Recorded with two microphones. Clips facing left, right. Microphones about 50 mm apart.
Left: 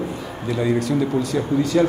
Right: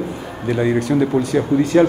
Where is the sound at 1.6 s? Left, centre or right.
Right.